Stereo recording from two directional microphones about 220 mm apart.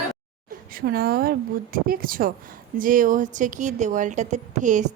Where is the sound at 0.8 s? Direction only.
45° right (ahead or behind).